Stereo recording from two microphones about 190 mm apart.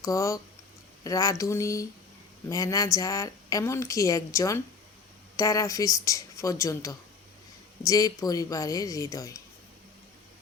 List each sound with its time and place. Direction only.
0.0 s a woman's voice: 15° left (ahead or behind)